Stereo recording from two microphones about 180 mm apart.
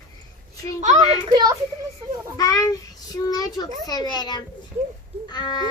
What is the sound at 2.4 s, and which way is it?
A child's voice, 20° left (ahead or behind).